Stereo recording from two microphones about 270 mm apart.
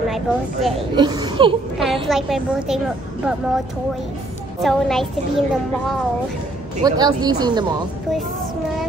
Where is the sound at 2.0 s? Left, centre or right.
Centre.